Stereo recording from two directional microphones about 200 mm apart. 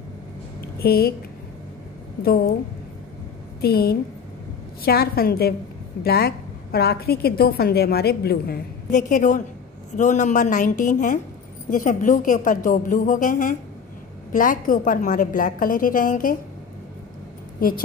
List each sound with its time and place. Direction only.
0.6 s a sound: 50° left (ahead or behind)
2.2 s a woman's voice: 50° left (ahead or behind)
3.6 s a woman's voice: 50° left (ahead or behind)
17.6 s a woman's voice: 45° left (ahead or behind)